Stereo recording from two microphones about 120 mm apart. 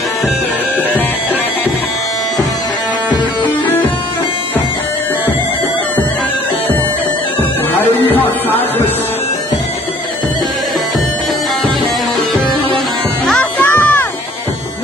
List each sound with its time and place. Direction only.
7.7 s music: 15° left (ahead or behind)
12.4 s music: 5° left (ahead or behind)